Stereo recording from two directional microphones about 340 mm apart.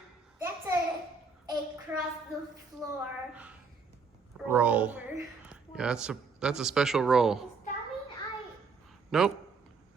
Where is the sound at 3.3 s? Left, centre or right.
Centre.